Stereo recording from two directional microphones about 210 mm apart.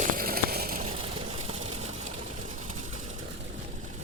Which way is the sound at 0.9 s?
25° right (ahead or behind).